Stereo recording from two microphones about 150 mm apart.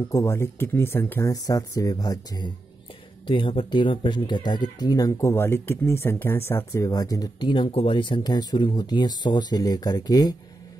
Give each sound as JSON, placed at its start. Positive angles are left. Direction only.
{"t": 0.1, "sound": "speech", "side_deg": 20}